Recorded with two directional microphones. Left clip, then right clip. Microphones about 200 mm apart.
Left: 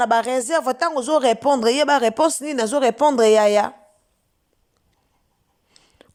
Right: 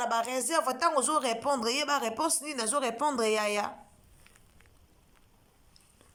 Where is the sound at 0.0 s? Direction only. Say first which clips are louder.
Left 12 dB; 40° left (ahead or behind).